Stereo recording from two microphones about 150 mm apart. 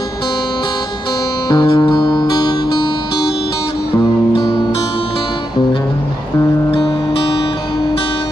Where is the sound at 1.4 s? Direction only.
30° left (ahead or behind).